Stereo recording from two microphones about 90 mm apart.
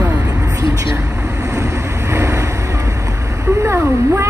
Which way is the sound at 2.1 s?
35° right (ahead or behind).